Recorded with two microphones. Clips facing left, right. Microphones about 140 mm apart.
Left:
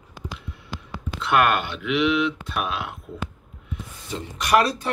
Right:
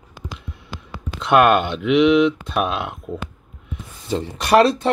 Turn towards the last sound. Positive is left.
turn(degrees=-25)  # may be behind; listen again after turning